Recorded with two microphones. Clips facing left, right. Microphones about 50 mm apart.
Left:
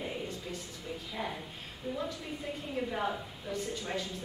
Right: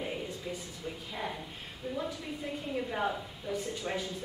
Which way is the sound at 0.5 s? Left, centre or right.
Right.